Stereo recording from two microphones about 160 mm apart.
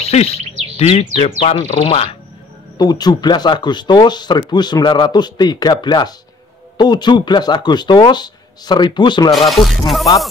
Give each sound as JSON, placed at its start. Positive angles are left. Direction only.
{"t": 0.0, "sound": "speech", "side_deg": 40}
{"t": 2.8, "sound": "speech", "side_deg": 25}
{"t": 9.5, "sound": "music", "side_deg": 0}